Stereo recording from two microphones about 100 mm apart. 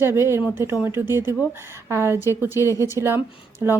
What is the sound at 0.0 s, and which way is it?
Speech, 25° right (ahead or behind).